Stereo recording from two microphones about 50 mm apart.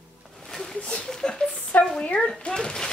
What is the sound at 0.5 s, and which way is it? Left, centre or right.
Speech, centre.